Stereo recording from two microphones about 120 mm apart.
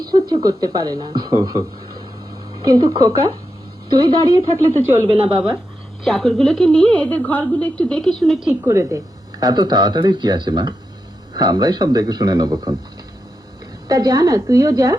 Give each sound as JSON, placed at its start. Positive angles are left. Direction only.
{"t": 0.1, "sound": "speech", "side_deg": -35}
{"t": 5.0, "sound": "speech", "side_deg": -45}
{"t": 6.1, "sound": "a woman's voice", "side_deg": 5}
{"t": 8.6, "sound": "a woman's voice", "side_deg": -25}
{"t": 9.4, "sound": "speech", "side_deg": -35}
{"t": 13.8, "sound": "speech", "side_deg": -30}